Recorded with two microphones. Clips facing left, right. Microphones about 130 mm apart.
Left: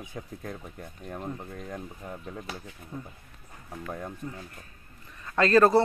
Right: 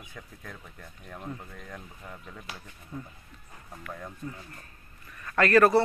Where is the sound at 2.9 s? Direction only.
20° left (ahead or behind).